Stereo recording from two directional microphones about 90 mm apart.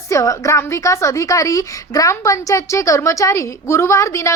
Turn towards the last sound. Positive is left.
turn(degrees=35)  # may be behind; listen again after turning